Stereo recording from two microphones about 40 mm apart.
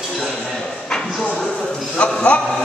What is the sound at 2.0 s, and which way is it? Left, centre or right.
Speech, left.